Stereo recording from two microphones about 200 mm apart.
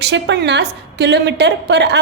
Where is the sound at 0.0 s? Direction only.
60° right (ahead or behind).